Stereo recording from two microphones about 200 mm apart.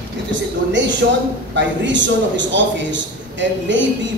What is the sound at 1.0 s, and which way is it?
Speech, 60° right (ahead or behind).